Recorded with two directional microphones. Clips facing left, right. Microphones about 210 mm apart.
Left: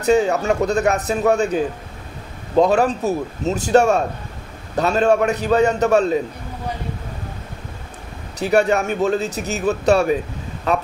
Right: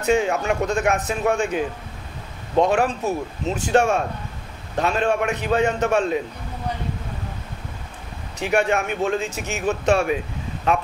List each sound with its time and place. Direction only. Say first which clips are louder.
0.0 s speech: left 4 dB; 40° left (ahead or behind)
8.4 s speech: left 4 dB; 40° left (ahead or behind)